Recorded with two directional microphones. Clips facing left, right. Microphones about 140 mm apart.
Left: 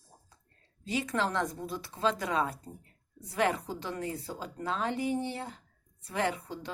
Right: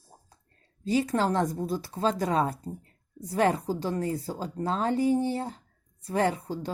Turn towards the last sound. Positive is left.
turn(degrees=-40)  # may be behind; listen again after turning